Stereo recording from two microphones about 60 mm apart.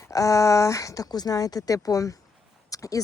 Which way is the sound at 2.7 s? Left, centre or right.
Left.